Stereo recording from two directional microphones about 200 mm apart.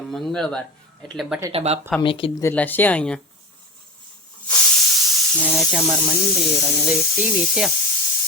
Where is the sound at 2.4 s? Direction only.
10° left (ahead or behind).